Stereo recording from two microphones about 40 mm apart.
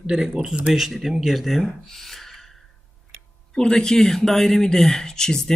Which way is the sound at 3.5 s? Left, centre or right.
Centre.